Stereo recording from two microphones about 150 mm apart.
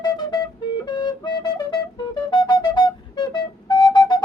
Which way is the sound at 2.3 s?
30° left (ahead or behind).